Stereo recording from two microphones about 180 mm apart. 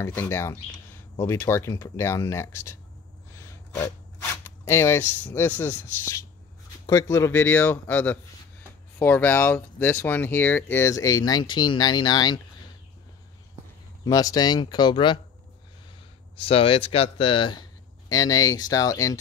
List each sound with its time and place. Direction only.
0.0 s speech: 15° left (ahead or behind)
14.0 s speech: 20° left (ahead or behind)
16.3 s speech: 30° left (ahead or behind)